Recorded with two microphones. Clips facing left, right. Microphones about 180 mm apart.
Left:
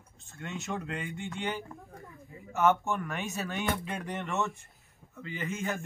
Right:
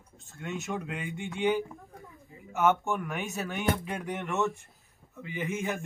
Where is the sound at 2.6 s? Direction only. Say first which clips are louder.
Even; 10° right (ahead or behind).